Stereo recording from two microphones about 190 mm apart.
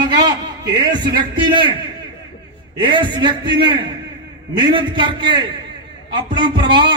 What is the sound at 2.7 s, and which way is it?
Speech, 25° right (ahead or behind).